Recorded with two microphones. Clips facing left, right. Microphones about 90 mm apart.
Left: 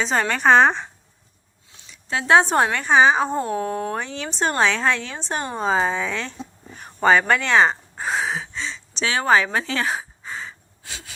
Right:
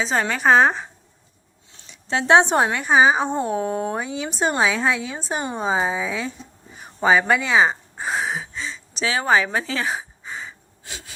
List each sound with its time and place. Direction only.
0.0 s a woman's voice: centre (ahead or behind)
1.9 s speech: 25° right (ahead or behind); by 6.3 s 5° right (ahead or behind)
6.7 s a sound: 5° right (ahead or behind)
10.8 s wheeze: 25° right (ahead or behind)